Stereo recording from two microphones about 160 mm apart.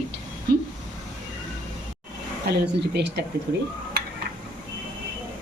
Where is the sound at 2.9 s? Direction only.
90° right.